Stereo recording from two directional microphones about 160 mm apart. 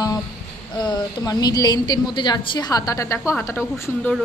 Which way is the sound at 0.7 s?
25° left (ahead or behind).